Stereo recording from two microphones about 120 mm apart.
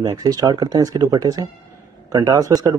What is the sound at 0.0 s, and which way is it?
Speech, 35° right (ahead or behind).